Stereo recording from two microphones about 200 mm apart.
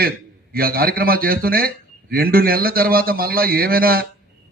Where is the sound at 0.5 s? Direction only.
50° right (ahead or behind).